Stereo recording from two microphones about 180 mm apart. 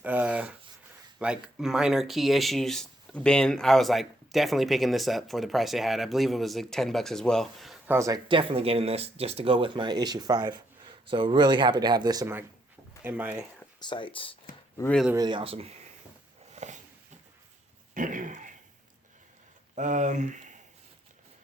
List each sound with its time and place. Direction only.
0.0 s writing: 10° right (ahead or behind)
1.2 s speech: 5° right (ahead or behind)
7.9 s speech: 15° right (ahead or behind)
13.7 s speech: 25° left (ahead or behind)
14.8 s speech: 10° left (ahead or behind)
15.1 s speech: 25° right (ahead or behind)
16.6 s a sound: 40° right (ahead or behind)
17.9 s a sound: 45° right (ahead or behind)
19.7 s speech: 45° right (ahead or behind)